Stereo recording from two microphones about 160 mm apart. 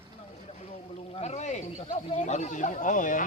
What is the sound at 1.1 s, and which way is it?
Snake, 45° left (ahead or behind).